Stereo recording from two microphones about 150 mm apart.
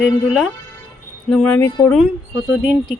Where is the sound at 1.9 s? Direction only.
Centre (ahead or behind).